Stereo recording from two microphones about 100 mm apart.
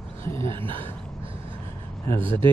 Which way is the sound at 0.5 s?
60° right (ahead or behind).